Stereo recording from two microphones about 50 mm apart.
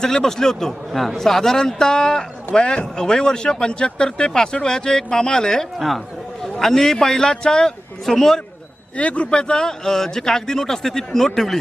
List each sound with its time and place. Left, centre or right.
0.0 s a man's voice: centre
9.0 s a man's voice: left; by 11.6 s centre